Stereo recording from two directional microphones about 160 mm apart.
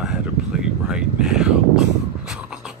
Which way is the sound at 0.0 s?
5° right (ahead or behind).